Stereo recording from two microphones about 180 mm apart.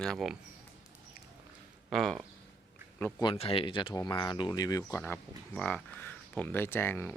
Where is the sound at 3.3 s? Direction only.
30° left (ahead or behind).